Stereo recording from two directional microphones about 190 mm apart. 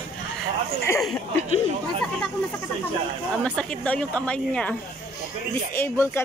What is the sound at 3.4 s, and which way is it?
Speech, 5° left (ahead or behind).